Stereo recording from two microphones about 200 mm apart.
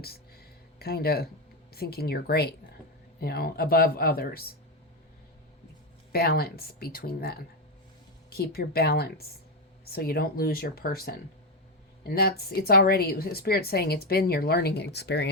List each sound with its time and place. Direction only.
0.0 s a sound: 50° left (ahead or behind)
1.7 s a woman's voice: 50° left (ahead or behind)
6.1 s a woman's voice: 50° left (ahead or behind)